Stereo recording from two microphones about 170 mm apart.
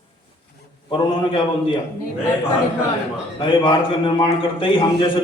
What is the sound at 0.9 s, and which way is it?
Speech, 30° left (ahead or behind).